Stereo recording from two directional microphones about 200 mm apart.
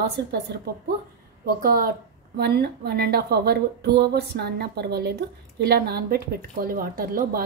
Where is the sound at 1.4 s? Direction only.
50° right (ahead or behind).